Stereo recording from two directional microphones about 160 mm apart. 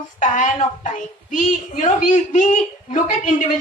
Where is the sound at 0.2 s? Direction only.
50° left (ahead or behind).